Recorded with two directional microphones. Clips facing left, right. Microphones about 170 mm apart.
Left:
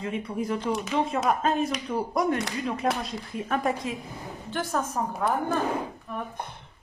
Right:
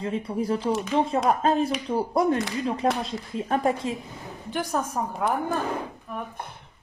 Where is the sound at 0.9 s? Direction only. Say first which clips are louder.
Right 2 dB; 30° right (ahead or behind).